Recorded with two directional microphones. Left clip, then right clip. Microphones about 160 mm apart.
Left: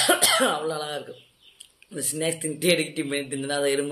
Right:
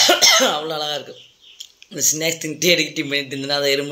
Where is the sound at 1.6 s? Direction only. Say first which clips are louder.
Right 12 dB; 20° right (ahead or behind).